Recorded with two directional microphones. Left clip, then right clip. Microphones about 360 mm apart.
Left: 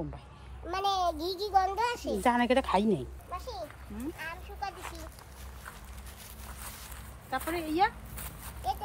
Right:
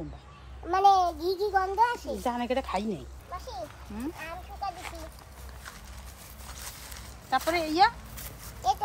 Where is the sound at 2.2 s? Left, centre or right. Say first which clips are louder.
Left 4 dB; left.